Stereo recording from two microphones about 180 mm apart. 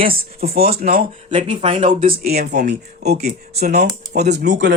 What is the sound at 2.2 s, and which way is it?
Speech, 60° right (ahead or behind).